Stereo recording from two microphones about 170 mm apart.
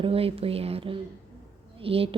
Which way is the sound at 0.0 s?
35° right (ahead or behind).